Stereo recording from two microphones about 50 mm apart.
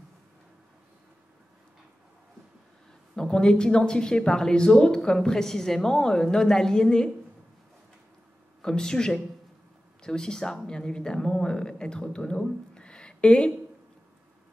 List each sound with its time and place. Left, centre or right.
3.2 s speech: centre
8.6 s speech: centre
12.7 s a sound: centre